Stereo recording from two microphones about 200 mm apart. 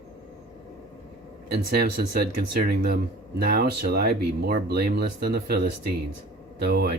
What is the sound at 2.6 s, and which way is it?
Speech, 50° right (ahead or behind).